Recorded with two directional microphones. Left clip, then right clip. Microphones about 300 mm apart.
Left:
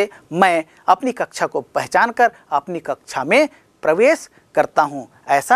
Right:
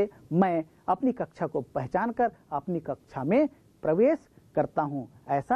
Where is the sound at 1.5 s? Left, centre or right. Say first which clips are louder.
Left 8 dB; centre.